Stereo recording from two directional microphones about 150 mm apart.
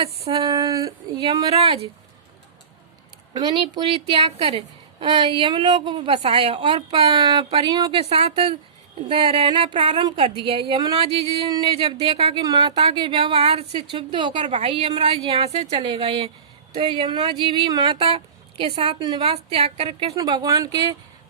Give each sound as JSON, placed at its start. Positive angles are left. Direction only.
{"t": 0.3, "sound": "speech", "side_deg": -25}
{"t": 3.3, "sound": "a woman's voice", "side_deg": -35}
{"t": 14.4, "sound": "a woman's voice", "side_deg": -45}
{"t": 20.1, "sound": "speech", "side_deg": -25}